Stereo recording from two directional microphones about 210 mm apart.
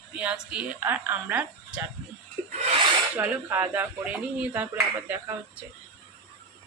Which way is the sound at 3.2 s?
10° right (ahead or behind).